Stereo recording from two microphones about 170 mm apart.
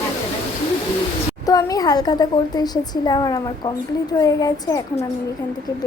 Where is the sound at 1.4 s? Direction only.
20° left (ahead or behind).